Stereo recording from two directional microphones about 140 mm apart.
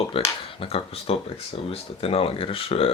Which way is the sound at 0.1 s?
40° left (ahead or behind).